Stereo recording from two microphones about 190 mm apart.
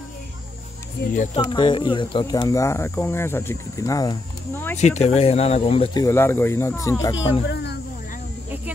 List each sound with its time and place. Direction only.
1.1 s speech: 40° left (ahead or behind)
1.5 s speech: 25° left (ahead or behind)
4.7 s speech: 35° left (ahead or behind)
6.0 s speech: 15° left (ahead or behind)
7.4 s speech: 60° left (ahead or behind)